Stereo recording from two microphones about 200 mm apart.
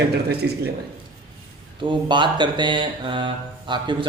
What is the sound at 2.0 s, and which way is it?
Mantra, 25° right (ahead or behind).